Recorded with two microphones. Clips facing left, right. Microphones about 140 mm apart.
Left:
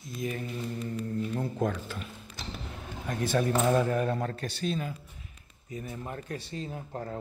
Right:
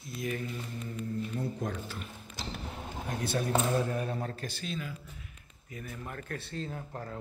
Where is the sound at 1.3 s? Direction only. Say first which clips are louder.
Left 5 dB; 75° left (ahead or behind).